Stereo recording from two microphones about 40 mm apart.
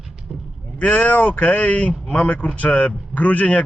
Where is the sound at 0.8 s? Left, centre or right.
Left.